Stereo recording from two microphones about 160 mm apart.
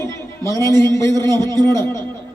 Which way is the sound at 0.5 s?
20° left (ahead or behind).